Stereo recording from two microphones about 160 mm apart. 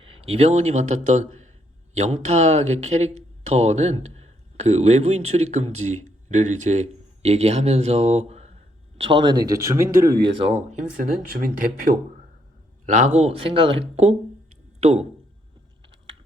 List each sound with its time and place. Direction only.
0.0 s a man's voice: 35° right (ahead or behind); by 10.2 s 20° right (ahead or behind)
10.8 s speech: 60° right (ahead or behind)
12.8 s speech: 50° right (ahead or behind)